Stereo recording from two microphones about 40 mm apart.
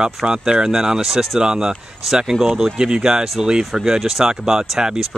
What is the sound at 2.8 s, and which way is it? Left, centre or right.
Speech, centre.